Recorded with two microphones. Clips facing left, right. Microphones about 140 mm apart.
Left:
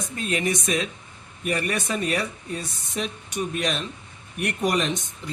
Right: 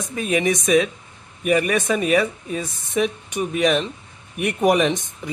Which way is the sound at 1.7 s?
75° right (ahead or behind).